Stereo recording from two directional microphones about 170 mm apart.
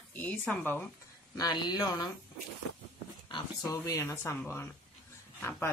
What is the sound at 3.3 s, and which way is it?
Speech, 25° left (ahead or behind).